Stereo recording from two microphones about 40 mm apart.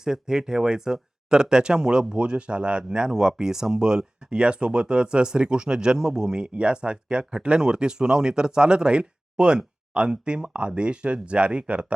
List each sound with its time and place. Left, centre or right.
0.0 s speech: centre; by 11.9 s right